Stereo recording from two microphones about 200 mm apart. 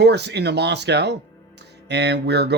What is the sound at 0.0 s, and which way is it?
Speech, 55° right (ahead or behind).